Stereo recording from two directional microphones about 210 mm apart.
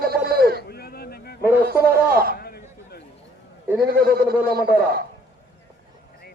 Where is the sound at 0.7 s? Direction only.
50° left (ahead or behind).